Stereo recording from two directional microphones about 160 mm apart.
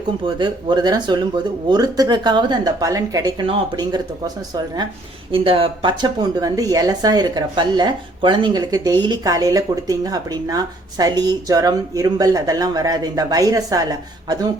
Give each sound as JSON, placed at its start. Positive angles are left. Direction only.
{"t": 0.3, "sound": "a woman's voice", "side_deg": -30}